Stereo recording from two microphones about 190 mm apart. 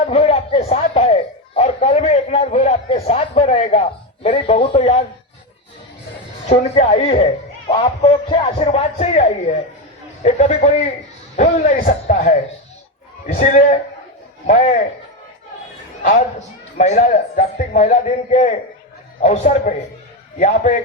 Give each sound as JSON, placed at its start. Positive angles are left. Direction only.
{"t": 0.0, "sound": "speech", "side_deg": 30}
{"t": 6.5, "sound": "a man's voice", "side_deg": 35}
{"t": 10.2, "sound": "a man's voice", "side_deg": 35}
{"t": 16.7, "sound": "a man's voice", "side_deg": 40}